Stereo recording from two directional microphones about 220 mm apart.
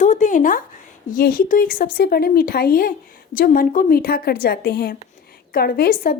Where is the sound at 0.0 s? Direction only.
35° left (ahead or behind).